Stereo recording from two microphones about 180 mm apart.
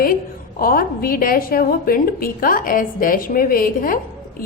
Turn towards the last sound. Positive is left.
turn(degrees=50)  # may be behind; listen again after turning